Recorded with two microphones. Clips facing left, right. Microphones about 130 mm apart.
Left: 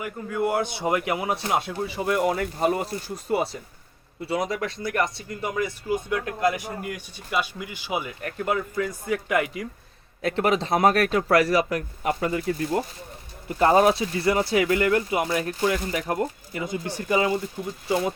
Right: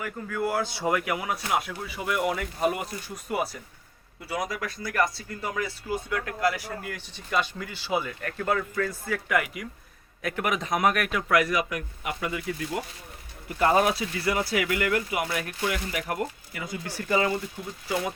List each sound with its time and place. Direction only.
0.0 s speech: 20° left (ahead or behind)